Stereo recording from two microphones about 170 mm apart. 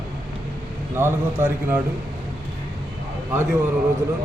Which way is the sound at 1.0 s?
15° right (ahead or behind).